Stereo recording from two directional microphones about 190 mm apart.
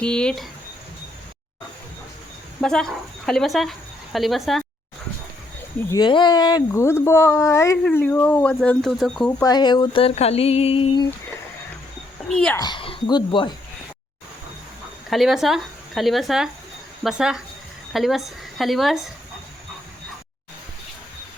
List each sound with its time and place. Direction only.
0.0 s speech: 5° left (ahead or behind)
2.6 s speech: 5° left (ahead or behind)
5.9 s speech: 25° left (ahead or behind); by 9.3 s centre (ahead or behind)
9.4 s a sound: 20° left (ahead or behind)
12.3 s speech: 5° left (ahead or behind)
12.5 s a sound: 25° left (ahead or behind)
15.1 s speech: centre (ahead or behind)